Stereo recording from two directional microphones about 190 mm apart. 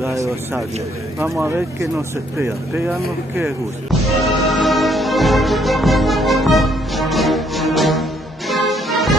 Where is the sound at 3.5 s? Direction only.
Centre (ahead or behind).